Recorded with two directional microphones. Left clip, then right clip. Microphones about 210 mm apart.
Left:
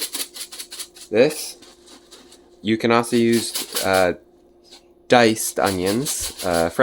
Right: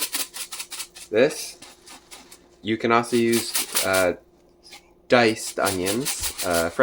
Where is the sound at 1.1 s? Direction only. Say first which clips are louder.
Left 3 dB; 40° left (ahead or behind).